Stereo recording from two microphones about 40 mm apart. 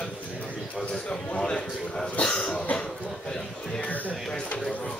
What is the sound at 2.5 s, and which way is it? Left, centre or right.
Cough, left.